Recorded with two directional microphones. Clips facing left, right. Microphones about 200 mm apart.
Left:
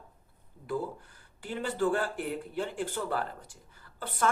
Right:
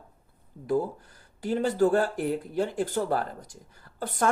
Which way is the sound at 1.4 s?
40° right (ahead or behind).